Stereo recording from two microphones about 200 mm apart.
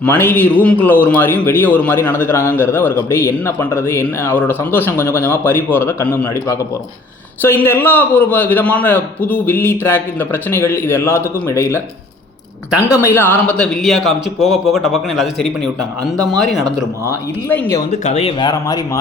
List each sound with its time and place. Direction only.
0.0 s a man's voice: 10° left (ahead or behind)
17.5 s a man's voice: 10° left (ahead or behind)
18.0 s speech: 30° left (ahead or behind)